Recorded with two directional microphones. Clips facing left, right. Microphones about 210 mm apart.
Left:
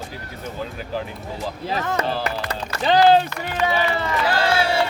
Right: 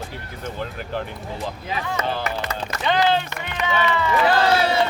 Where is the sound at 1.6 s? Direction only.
40° left (ahead or behind).